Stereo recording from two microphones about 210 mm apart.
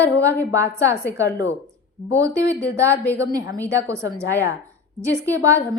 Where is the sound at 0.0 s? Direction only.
15° right (ahead or behind).